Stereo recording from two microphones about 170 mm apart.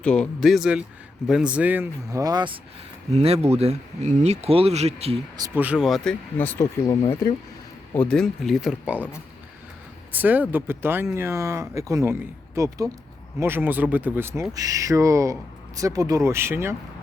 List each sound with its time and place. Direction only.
0.0 s speech: 5° left (ahead or behind); by 2.6 s 25° right (ahead or behind)
3.1 s speech: 40° right (ahead or behind)
5.5 s speech: 5° right (ahead or behind); by 7.0 s 15° left (ahead or behind)
7.9 s speech: 5° left (ahead or behind)
10.1 s speech: 10° right (ahead or behind)